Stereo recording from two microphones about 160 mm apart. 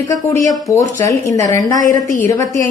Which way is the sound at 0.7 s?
20° left (ahead or behind).